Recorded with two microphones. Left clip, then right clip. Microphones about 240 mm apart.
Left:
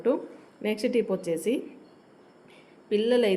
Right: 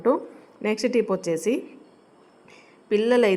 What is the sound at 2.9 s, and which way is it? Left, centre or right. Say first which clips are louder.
Speech: right 4 dB; centre.